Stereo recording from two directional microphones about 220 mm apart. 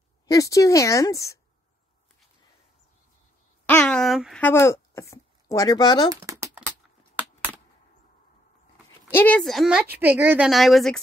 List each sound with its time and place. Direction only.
0.3 s a woman's voice: 15° left (ahead or behind)
3.6 s a woman's voice: 5° left (ahead or behind)
6.2 s a sound: 15° right (ahead or behind)
9.1 s a woman's voice: 5° left (ahead or behind)